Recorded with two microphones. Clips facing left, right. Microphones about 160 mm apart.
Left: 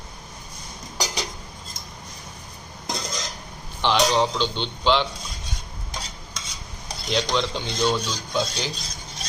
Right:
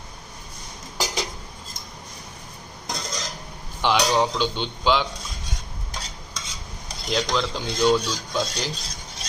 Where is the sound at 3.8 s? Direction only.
10° right (ahead or behind).